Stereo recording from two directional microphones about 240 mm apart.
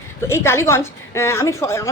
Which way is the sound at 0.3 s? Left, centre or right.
Centre.